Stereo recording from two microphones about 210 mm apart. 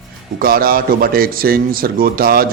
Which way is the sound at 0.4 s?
45° right (ahead or behind).